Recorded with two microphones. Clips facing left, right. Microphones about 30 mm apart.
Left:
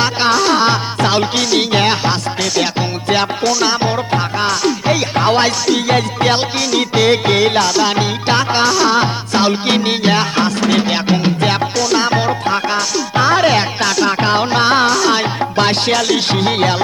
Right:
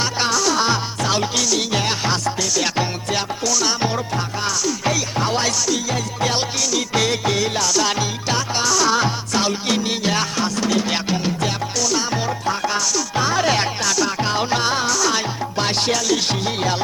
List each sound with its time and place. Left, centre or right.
0.2 s music: left
3.5 s music: left
4.1 s music: left
7.8 s music: left
8.3 s music: left
10.6 s music: left
11.1 s music: left
13.5 s music: left
13.9 s music: left
14.3 s music: left
14.7 s music: left
15.0 s music: left
15.6 s music: left